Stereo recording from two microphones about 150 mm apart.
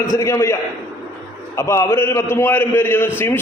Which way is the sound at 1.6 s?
20° left (ahead or behind).